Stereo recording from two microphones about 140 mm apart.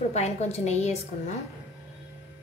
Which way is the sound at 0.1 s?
50° left (ahead or behind).